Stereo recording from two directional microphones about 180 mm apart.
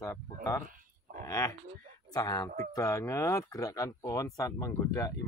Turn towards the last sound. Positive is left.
turn(degrees=20)  # may be behind; listen again after turning